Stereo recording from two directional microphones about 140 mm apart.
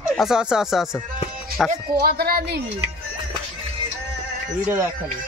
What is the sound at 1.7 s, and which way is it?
Speech, 90° right.